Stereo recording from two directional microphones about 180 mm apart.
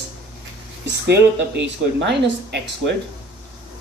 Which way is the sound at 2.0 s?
75° right (ahead or behind).